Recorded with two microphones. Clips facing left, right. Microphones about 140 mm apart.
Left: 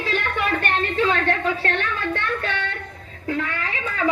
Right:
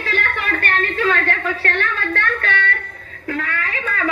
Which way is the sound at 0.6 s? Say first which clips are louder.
Right 1 dB; 20° left (ahead or behind).